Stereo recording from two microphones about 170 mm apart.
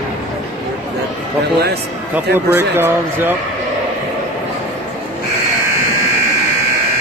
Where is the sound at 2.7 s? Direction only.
15° right (ahead or behind).